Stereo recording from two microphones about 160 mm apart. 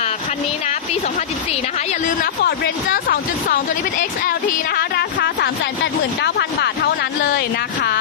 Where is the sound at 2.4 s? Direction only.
75° left (ahead or behind).